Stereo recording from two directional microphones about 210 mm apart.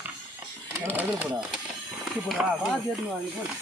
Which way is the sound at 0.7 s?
10° right (ahead or behind).